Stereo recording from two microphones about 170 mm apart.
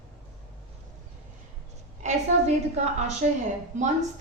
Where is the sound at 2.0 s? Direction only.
40° right (ahead or behind).